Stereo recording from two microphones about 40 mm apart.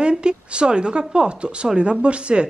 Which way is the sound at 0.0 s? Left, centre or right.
Right.